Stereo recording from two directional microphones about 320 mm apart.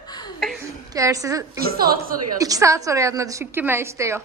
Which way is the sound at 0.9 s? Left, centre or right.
Centre.